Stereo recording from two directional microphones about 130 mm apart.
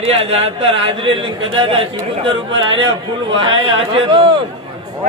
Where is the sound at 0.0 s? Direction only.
50° right (ahead or behind).